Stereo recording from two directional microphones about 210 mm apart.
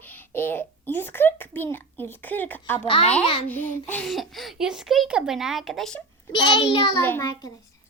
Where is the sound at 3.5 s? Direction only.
10° left (ahead or behind).